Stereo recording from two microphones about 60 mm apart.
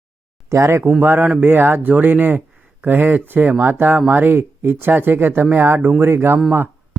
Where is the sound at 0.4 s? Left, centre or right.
Right.